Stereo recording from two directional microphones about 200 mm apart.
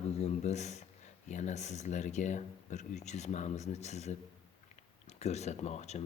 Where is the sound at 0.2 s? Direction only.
35° left (ahead or behind).